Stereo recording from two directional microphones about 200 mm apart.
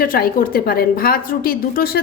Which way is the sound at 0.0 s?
45° left (ahead or behind).